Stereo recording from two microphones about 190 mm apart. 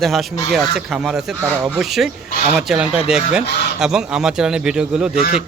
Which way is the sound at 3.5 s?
60° left (ahead or behind).